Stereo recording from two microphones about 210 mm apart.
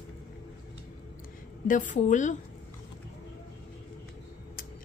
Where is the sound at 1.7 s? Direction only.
35° left (ahead or behind).